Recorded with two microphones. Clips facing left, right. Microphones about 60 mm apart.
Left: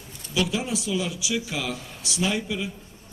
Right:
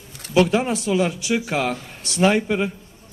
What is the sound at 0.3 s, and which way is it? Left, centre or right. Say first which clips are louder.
A man's voice: right 8 dB; right.